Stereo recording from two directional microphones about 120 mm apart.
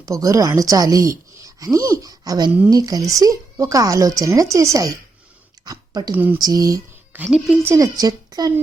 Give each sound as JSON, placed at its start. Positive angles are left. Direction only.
{"t": 0.0, "sound": "speech", "side_deg": -30}
{"t": 6.1, "sound": "speech", "side_deg": -15}
{"t": 6.4, "sound": "a woman's voice", "side_deg": -30}
{"t": 7.3, "sound": "a woman's voice", "side_deg": -5}
{"t": 7.6, "sound": "a woman's voice", "side_deg": -25}